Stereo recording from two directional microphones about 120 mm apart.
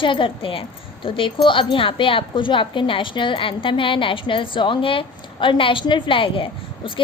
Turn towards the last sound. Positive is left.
turn(degrees=45)  # may be behind; listen again after turning